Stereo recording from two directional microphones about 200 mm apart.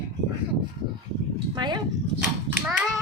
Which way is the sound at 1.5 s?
20° right (ahead or behind).